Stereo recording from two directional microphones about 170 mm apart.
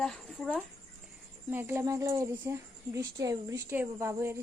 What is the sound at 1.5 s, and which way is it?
A woman's voice, 15° right (ahead or behind).